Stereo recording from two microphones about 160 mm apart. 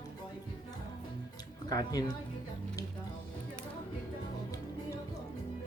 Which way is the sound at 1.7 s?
25° left (ahead or behind).